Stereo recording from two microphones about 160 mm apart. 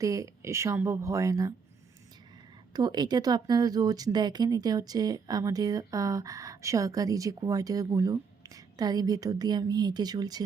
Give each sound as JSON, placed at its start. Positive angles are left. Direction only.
{"t": 0.0, "sound": "speech", "side_deg": -20}
{"t": 2.7, "sound": "speech", "side_deg": -25}